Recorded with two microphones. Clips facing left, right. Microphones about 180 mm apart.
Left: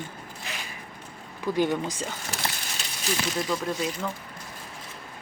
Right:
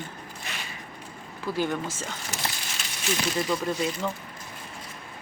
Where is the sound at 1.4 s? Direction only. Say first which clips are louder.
Left 3 dB; 20° left (ahead or behind).